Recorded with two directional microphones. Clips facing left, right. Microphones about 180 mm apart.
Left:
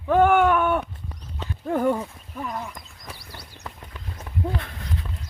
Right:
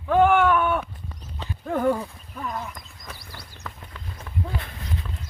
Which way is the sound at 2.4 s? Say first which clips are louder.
Even; 10° left (ahead or behind).